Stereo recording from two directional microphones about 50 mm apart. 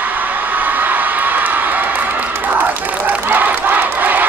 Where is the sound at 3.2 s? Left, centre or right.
Right.